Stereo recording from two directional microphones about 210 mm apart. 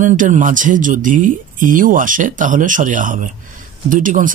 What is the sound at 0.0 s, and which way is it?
Speech, 35° right (ahead or behind).